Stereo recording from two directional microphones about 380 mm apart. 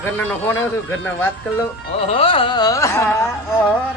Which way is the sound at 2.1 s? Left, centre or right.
Centre.